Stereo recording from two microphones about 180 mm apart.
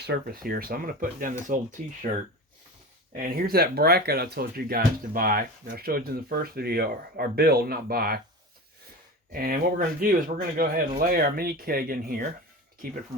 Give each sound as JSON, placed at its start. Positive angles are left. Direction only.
{"t": 0.0, "sound": "speech", "side_deg": -60}
{"t": 3.2, "sound": "speech", "side_deg": -55}
{"t": 9.3, "sound": "speech", "side_deg": -55}